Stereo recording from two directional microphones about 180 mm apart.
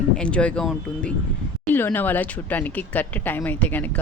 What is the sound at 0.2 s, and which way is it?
Speech, 5° left (ahead or behind).